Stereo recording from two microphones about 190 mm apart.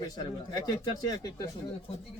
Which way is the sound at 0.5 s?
20° left (ahead or behind).